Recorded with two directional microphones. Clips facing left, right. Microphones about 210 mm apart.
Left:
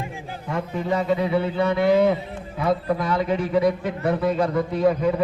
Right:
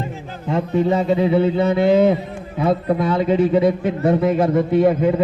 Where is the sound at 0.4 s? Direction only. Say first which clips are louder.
Right 8 dB; 25° right (ahead or behind).